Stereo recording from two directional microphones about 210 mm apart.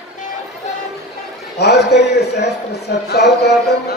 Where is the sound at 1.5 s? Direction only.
50° left (ahead or behind).